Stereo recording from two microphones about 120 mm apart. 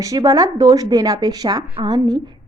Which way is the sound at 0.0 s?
30° right (ahead or behind).